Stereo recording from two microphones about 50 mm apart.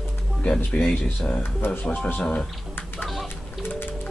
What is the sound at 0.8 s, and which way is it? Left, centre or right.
Speech, left.